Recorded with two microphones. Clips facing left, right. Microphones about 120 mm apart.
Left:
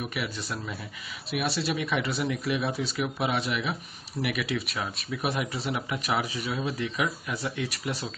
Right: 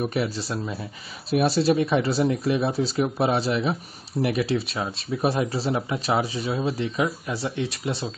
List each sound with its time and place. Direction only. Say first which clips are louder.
0.0 s speech: right 8 dB; 35° right (ahead or behind)